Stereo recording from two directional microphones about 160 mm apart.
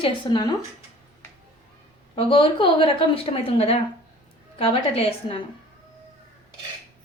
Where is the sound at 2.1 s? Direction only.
35° left (ahead or behind).